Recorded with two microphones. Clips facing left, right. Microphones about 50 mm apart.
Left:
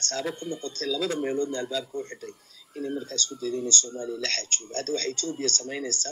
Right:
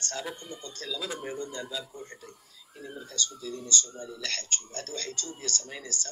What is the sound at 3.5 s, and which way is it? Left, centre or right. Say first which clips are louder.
Speech: left 8 dB; left.